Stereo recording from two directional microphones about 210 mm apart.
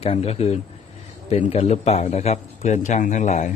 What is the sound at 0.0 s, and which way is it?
A man's voice, 30° left (ahead or behind).